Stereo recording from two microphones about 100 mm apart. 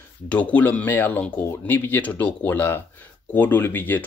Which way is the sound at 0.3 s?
15° left (ahead or behind).